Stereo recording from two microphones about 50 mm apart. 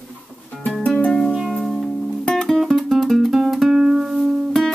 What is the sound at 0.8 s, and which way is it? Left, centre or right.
Music, left.